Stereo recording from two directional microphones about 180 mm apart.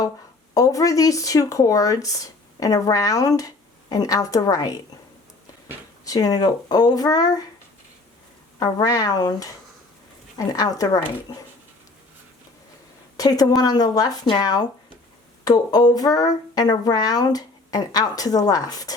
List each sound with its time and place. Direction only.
0.5 s speech: 20° left (ahead or behind)
6.1 s speech: 20° left (ahead or behind)
8.5 s speech: 20° left (ahead or behind)
13.1 s a woman's voice: 20° left (ahead or behind)